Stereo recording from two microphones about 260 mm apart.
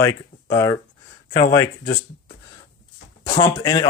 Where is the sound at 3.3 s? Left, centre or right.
Centre.